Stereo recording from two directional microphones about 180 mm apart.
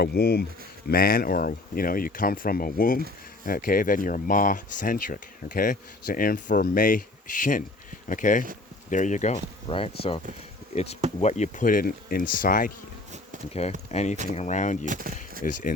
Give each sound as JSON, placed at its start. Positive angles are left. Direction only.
{"t": 0.0, "sound": "speech", "side_deg": 60}
{"t": 11.2, "sound": "speech", "side_deg": 40}
{"t": 13.5, "sound": "speech", "side_deg": 35}
{"t": 14.8, "sound": "speech", "side_deg": -50}